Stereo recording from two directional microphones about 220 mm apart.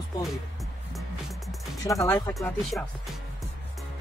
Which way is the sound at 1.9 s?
15° left (ahead or behind).